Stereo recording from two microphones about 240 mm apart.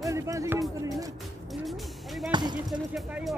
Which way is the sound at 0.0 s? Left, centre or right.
Centre.